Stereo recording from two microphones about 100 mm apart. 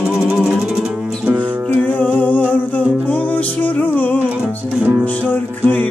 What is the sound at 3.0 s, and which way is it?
Music, 15° left (ahead or behind).